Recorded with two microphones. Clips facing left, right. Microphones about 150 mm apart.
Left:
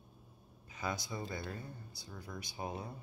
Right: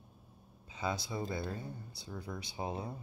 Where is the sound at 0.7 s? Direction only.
25° right (ahead or behind).